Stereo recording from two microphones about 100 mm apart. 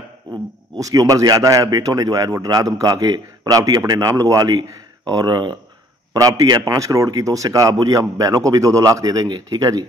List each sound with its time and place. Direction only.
0.3 s a man's voice: 35° right (ahead or behind)
6.1 s a man's voice: 35° right (ahead or behind)